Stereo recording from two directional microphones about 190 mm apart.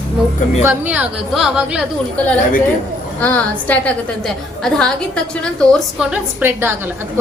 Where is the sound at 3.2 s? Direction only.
10° left (ahead or behind).